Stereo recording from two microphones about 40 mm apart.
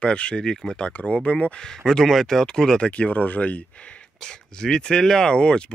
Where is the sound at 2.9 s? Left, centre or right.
Left.